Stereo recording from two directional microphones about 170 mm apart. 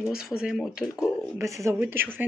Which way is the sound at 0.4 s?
5° right (ahead or behind).